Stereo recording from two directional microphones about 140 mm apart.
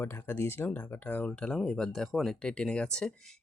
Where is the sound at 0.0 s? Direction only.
15° left (ahead or behind).